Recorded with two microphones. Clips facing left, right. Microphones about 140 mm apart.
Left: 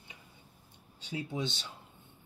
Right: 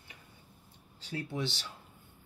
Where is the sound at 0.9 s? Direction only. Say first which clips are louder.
Even; 20° left (ahead or behind).